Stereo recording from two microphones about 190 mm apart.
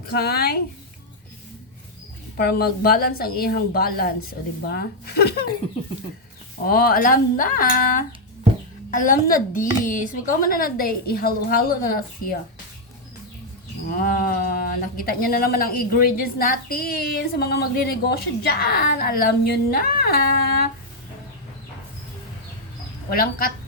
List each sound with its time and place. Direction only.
0.1 s a woman's voice: 55° left (ahead or behind)
2.3 s a woman's voice: 55° left (ahead or behind)
6.7 s speech: 50° left (ahead or behind)
14.0 s speech: 50° left (ahead or behind)
23.0 s speech: 50° left (ahead or behind)